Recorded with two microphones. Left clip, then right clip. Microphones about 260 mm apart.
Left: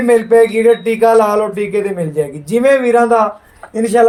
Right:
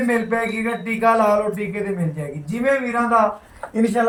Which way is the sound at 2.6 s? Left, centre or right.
Left.